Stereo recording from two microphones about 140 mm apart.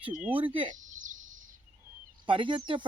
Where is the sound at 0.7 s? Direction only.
65° right (ahead or behind).